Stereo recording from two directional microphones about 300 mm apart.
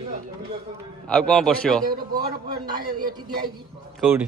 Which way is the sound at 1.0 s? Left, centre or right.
Centre.